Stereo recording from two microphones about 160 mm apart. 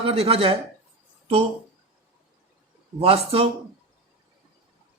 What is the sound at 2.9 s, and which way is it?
Speech, 35° right (ahead or behind).